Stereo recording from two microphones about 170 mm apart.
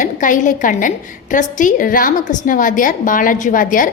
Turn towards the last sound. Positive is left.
turn(degrees=50)  # may be behind; listen again after turning